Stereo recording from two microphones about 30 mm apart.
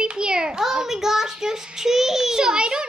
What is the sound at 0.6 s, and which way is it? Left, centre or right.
A child's voice, centre.